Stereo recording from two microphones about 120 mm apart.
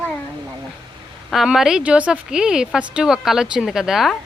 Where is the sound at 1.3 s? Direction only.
5° right (ahead or behind).